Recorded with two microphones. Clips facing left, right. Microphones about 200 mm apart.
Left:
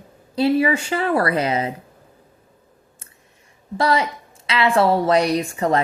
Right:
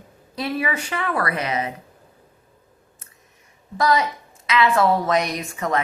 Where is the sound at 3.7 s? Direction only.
30° left (ahead or behind).